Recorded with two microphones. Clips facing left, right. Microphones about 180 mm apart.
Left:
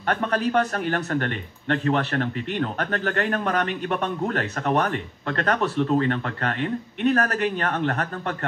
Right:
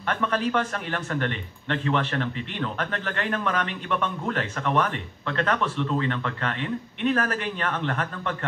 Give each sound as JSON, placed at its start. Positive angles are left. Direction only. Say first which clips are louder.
{"t": 0.0, "sound": "a man's voice", "louder": "left 2 dB", "side_deg": 40}